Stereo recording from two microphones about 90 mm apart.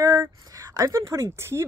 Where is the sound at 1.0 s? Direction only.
30° right (ahead or behind).